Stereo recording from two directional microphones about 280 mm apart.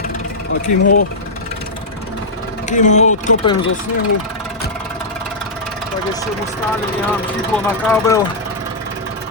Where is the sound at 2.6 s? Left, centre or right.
Left.